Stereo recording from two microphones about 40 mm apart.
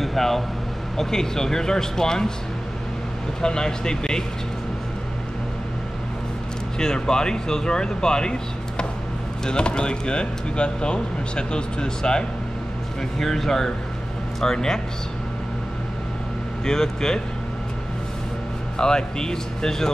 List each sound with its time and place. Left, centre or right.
0.0 s air conditioning: centre
0.9 s speech: centre
3.3 s speech: centre
6.8 s speech: centre
13.2 s speech: centre
16.6 s speech: centre
18.8 s speech: centre